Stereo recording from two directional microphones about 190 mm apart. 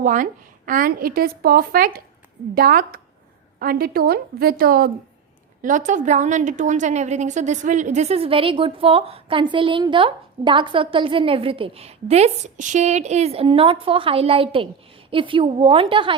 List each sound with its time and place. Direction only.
0.0 s a woman's voice: 45° right (ahead or behind)
5.6 s a woman's voice: 40° right (ahead or behind)